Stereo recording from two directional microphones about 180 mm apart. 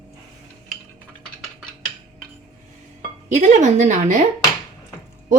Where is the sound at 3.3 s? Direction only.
40° right (ahead or behind).